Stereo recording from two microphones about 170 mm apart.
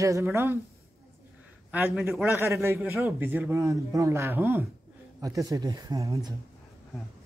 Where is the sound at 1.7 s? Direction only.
10° right (ahead or behind).